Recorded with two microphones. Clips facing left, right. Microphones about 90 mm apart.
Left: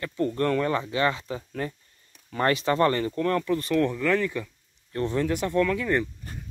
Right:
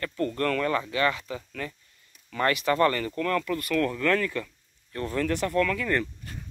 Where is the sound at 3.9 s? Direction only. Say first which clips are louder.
Left 1 dB; 10° left (ahead or behind).